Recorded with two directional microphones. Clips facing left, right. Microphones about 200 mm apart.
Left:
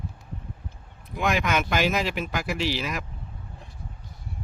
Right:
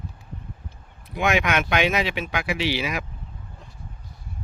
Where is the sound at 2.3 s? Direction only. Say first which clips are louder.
Right 2 dB; 70° right (ahead or behind).